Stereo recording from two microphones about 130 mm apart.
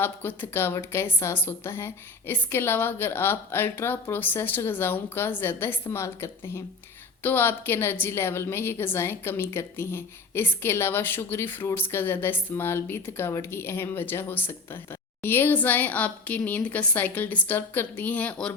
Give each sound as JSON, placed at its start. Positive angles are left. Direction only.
{"t": 0.0, "sound": "a woman's voice", "side_deg": 15}